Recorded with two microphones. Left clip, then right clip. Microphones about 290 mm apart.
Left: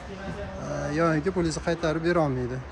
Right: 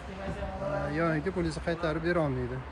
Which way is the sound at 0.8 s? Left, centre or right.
Centre.